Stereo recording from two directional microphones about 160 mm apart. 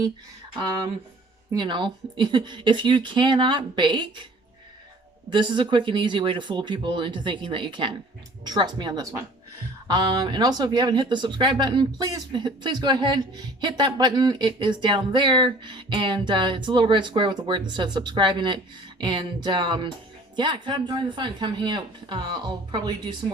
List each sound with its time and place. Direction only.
1.5 s speech: 30° right (ahead or behind)
5.3 s speech: 30° right (ahead or behind)